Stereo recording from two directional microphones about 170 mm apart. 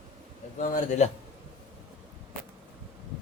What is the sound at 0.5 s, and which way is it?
Speech, 50° left (ahead or behind).